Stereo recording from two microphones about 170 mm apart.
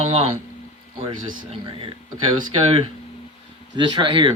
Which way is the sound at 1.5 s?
30° right (ahead or behind).